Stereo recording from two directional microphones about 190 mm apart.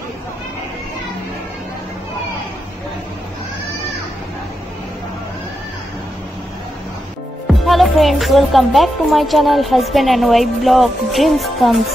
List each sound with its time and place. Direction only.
7.6 s music: centre (ahead or behind)